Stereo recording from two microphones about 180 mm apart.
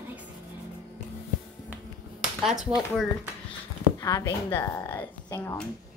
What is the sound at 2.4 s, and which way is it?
Speech, centre (ahead or behind).